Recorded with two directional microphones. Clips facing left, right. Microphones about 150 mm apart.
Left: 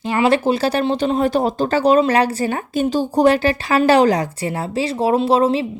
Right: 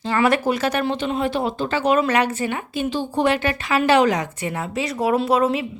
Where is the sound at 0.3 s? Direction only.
30° left (ahead or behind).